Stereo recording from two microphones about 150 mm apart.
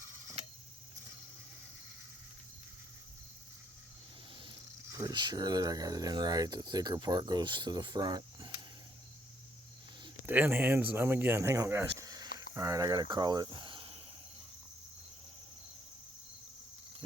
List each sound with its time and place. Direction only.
4.9 s speech: 20° right (ahead or behind)
10.2 s speech: 10° right (ahead or behind); by 14.0 s 35° right (ahead or behind)